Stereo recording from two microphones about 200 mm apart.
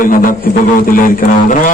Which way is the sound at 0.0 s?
45° left (ahead or behind).